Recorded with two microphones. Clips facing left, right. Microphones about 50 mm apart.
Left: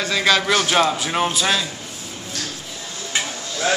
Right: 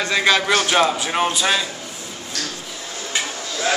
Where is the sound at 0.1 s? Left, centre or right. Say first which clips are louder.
Right 1 dB; centre.